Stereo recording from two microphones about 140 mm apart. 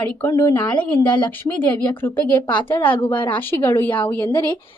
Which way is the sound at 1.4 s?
15° left (ahead or behind).